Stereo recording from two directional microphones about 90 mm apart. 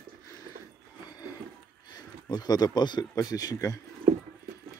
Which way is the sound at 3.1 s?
40° left (ahead or behind).